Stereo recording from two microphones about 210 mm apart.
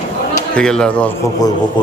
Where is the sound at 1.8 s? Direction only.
20° left (ahead or behind).